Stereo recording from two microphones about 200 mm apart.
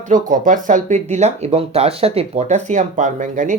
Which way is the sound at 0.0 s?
40° right (ahead or behind).